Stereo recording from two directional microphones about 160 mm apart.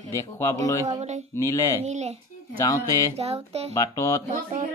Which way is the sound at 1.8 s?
45° right (ahead or behind).